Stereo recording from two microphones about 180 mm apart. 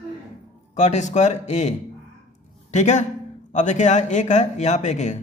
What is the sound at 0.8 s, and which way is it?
Speech, 40° left (ahead or behind).